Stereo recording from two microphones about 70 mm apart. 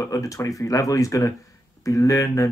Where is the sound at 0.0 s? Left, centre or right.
Left.